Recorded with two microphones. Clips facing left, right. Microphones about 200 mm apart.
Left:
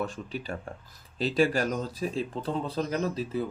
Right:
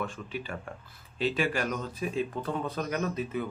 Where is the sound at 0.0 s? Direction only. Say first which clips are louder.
Left 2 dB; 40° left (ahead or behind).